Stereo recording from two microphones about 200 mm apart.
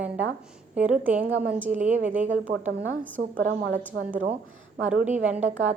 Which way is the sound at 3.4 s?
60° right (ahead or behind).